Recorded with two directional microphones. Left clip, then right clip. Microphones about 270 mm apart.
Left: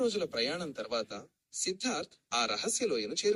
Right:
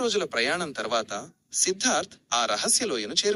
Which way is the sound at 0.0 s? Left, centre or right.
Centre.